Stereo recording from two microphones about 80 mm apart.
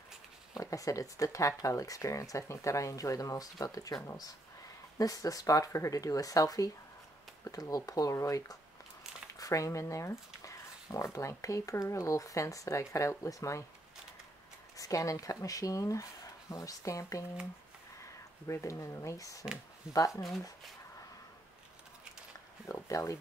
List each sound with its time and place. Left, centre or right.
0.6 s speech: left
14.8 s speech: left
18.5 s speech: left
20.1 s speech: centre
22.7 s speech: left